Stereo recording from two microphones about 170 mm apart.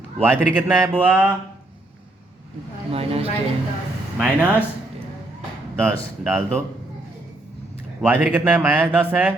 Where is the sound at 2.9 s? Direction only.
35° right (ahead or behind).